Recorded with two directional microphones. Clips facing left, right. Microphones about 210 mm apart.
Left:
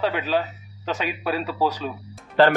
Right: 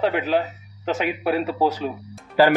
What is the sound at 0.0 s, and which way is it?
Speech, 20° right (ahead or behind).